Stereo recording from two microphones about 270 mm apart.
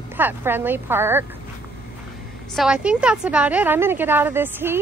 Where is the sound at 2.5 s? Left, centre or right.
Centre.